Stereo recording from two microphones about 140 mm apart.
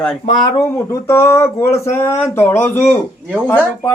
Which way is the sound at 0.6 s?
20° left (ahead or behind).